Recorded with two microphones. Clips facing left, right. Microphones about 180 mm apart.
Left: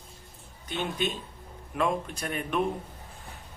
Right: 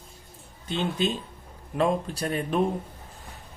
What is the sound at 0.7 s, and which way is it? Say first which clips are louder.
A man's voice: right 4 dB; 30° right (ahead or behind).